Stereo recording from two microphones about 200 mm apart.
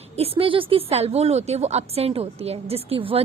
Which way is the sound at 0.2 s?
30° right (ahead or behind).